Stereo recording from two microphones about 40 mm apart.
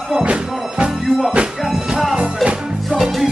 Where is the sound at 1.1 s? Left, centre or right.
Centre.